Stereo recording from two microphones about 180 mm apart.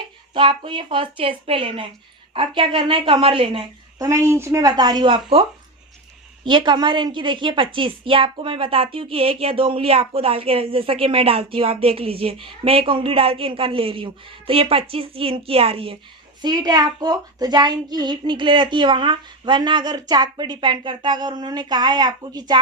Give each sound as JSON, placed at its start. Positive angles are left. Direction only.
{"t": 0.3, "sound": "a woman's voice", "side_deg": -30}
{"t": 3.9, "sound": "a woman's voice", "side_deg": -20}